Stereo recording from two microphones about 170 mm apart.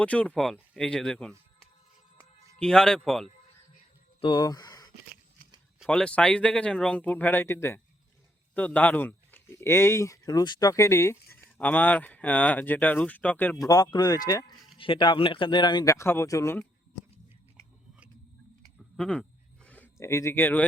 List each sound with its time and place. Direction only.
0.0 s speech: 5° left (ahead or behind)
2.6 s speech: 5° left (ahead or behind)
4.2 s speech: 25° left (ahead or behind)
5.8 s speech: 5° left (ahead or behind)
13.7 s speech: 20° left (ahead or behind)
18.8 s a sound: 5° left (ahead or behind)
19.6 s speech: 10° left (ahead or behind)